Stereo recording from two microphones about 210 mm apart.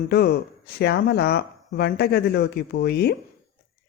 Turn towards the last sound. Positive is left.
turn(degrees=50)  # may be behind; listen again after turning